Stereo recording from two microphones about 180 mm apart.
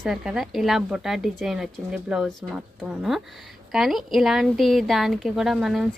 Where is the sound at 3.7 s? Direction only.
Centre (ahead or behind).